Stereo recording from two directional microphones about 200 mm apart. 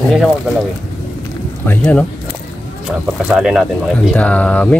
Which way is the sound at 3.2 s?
5° right (ahead or behind).